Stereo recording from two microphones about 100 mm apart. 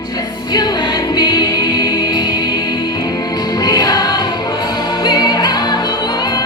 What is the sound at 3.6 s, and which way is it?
Music, 40° left (ahead or behind).